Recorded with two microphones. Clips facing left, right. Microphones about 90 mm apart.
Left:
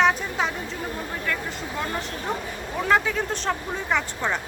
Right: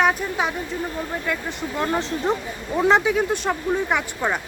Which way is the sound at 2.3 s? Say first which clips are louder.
Right 5 dB; 25° right (ahead or behind).